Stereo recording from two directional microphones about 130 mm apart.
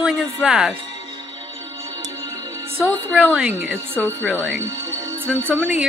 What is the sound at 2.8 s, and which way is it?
Speech, 15° left (ahead or behind).